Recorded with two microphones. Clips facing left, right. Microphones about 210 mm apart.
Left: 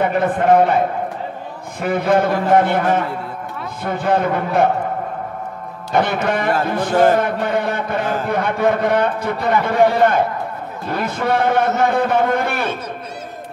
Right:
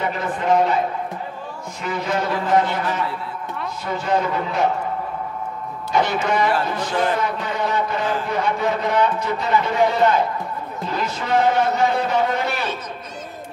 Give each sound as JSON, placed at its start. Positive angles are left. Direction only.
{"t": 0.0, "sound": "a man's voice", "side_deg": 55}
{"t": 5.9, "sound": "a man's voice", "side_deg": 55}